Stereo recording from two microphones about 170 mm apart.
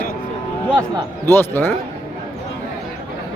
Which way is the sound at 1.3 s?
10° left (ahead or behind).